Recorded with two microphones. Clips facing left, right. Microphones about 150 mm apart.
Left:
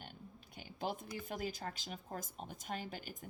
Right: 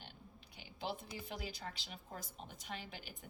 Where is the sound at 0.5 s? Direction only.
45° left (ahead or behind).